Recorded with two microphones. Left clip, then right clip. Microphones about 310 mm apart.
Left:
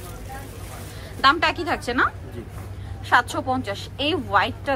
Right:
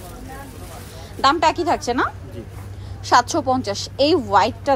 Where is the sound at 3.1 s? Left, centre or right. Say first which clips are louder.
Right 4 dB; centre.